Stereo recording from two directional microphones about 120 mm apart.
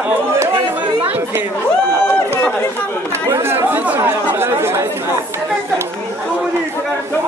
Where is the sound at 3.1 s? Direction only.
20° right (ahead or behind).